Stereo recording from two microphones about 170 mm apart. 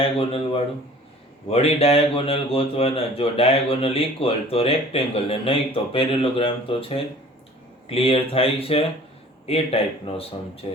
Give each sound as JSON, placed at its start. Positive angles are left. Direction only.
{"t": 0.0, "sound": "a man's voice", "side_deg": 35}